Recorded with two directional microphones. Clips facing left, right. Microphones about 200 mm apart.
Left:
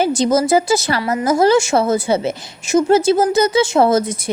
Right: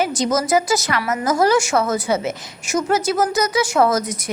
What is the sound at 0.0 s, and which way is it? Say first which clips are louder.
A woman's voice: left 5 dB; 30° left (ahead or behind).